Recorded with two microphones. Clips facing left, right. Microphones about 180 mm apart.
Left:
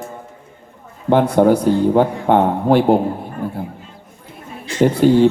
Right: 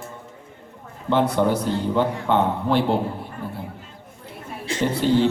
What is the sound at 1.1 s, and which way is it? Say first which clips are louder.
A man's voice: left 7 dB; 50° left (ahead or behind).